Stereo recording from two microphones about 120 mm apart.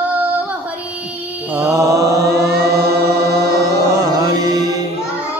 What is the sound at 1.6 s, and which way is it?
Mantra, 25° right (ahead or behind).